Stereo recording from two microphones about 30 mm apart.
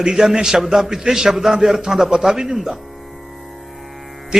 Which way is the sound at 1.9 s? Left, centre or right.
Centre.